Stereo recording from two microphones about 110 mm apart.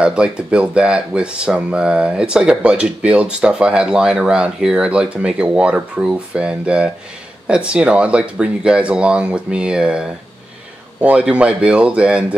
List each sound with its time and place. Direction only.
0.0 s speech: 10° right (ahead or behind)